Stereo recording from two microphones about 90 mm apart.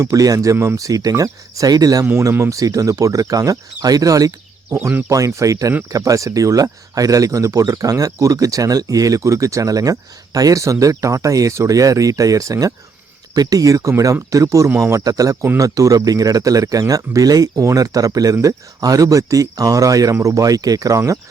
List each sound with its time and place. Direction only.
0.0 s speech: 40° right (ahead or behind)